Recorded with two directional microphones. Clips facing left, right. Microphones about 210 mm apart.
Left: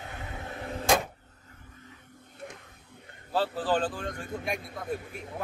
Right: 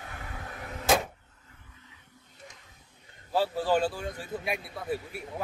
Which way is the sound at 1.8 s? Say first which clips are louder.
Left 6 dB; 55° left (ahead or behind).